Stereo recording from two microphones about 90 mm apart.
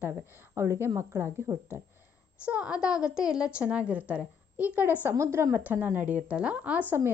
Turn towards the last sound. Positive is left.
turn(degrees=-25)  # may be behind; listen again after turning